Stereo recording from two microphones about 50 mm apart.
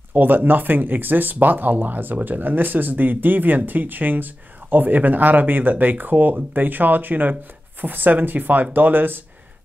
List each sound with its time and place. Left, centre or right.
0.1 s speech: right